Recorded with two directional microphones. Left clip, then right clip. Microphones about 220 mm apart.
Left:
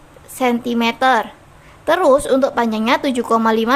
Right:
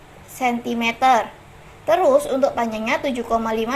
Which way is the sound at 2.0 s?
50° left (ahead or behind).